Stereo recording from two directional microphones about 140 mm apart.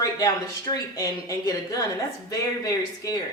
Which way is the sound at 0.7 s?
25° left (ahead or behind).